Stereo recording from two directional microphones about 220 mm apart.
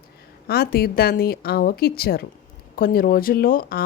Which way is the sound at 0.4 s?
45° left (ahead or behind).